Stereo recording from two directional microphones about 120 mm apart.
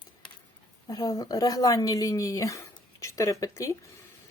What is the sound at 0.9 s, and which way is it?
Speech, 30° left (ahead or behind).